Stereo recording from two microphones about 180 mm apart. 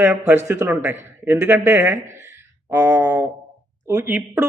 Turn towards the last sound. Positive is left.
turn(degrees=-15)  # may be behind; listen again after turning